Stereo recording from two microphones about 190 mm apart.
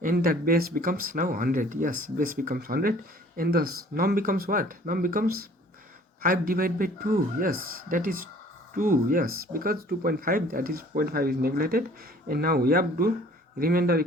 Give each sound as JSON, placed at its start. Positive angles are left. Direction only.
{"t": 0.0, "sound": "speech", "side_deg": -45}